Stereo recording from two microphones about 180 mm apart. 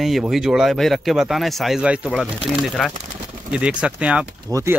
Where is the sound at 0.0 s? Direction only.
Centre (ahead or behind).